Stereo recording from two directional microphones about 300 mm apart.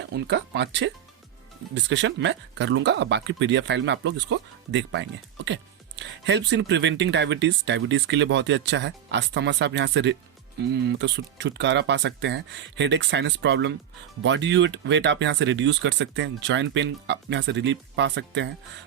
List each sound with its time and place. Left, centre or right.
0.1 s speech: right